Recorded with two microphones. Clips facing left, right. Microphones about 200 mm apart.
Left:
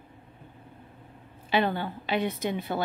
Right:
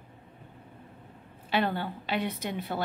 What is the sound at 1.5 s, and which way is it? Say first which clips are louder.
Speech: left 2 dB; 5° right (ahead or behind).